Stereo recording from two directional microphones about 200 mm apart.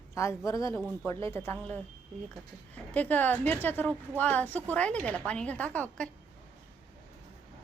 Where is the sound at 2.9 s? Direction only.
10° left (ahead or behind).